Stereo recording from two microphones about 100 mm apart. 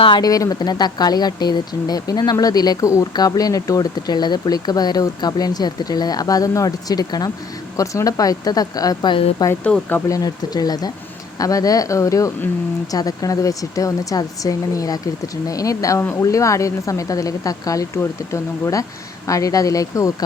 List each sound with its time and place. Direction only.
0.2 s speech: 35° left (ahead or behind)